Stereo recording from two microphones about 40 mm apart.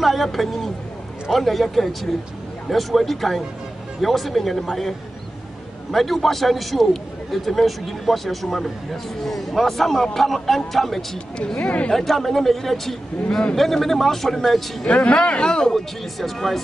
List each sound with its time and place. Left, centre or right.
0.0 s a man's voice: centre
11.5 s speech: left
11.9 s speech: centre
14.9 s speech: left
15.6 s a man's voice: centre